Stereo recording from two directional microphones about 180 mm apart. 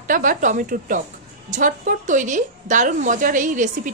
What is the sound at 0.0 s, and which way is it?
A woman's voice, 50° right (ahead or behind).